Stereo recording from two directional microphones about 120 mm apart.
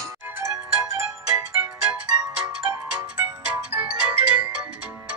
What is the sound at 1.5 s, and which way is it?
Music, 10° right (ahead or behind).